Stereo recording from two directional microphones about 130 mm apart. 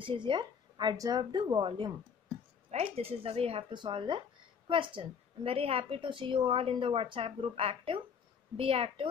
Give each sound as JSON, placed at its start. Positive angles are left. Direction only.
{"t": 0.0, "sound": "speech", "side_deg": -40}
{"t": 2.7, "sound": "a woman's voice", "side_deg": -50}